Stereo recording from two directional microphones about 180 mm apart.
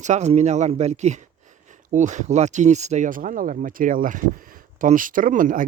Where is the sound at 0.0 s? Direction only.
40° right (ahead or behind).